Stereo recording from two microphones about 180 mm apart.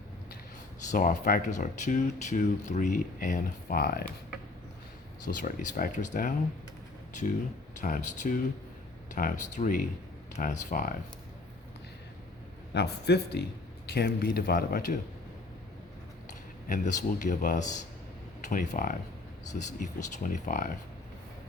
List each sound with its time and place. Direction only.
0.9 s speech: 50° left (ahead or behind)
5.2 s speech: 45° left (ahead or behind)
7.8 s speech: 45° left (ahead or behind)
12.7 s speech: 65° left (ahead or behind)
16.6 s speech: 45° left (ahead or behind)